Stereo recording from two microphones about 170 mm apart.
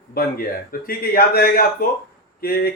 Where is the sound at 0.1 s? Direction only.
65° left (ahead or behind).